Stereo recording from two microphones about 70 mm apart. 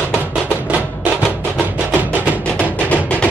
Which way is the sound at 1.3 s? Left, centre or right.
Left.